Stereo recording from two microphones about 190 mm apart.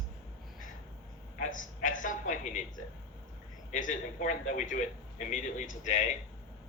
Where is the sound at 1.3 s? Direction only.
45° left (ahead or behind).